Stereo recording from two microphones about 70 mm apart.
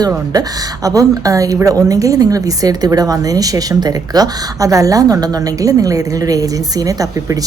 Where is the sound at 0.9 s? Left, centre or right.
Right.